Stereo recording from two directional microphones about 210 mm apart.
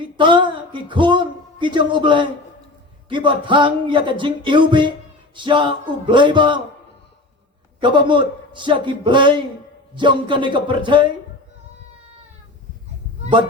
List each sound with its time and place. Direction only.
0.2 s speech: 20° right (ahead or behind)
7.8 s speech: 20° right (ahead or behind)